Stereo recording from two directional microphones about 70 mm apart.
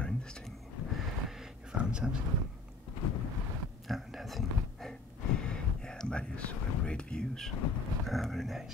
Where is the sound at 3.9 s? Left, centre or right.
Centre.